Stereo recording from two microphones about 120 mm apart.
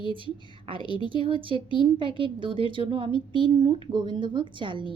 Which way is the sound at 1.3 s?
45° right (ahead or behind).